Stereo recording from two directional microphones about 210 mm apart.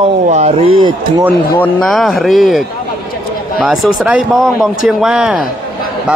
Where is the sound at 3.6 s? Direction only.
Centre (ahead or behind).